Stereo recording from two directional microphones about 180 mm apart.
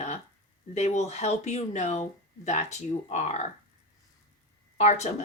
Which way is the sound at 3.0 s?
35° left (ahead or behind).